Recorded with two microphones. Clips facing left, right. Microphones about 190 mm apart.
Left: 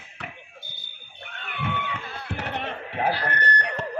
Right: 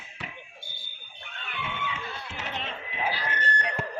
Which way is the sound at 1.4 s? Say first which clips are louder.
Left 4 dB; 55° left (ahead or behind).